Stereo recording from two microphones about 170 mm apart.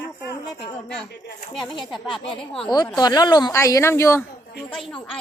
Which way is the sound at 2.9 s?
25° left (ahead or behind).